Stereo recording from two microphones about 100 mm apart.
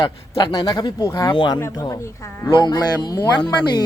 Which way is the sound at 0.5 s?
40° left (ahead or behind).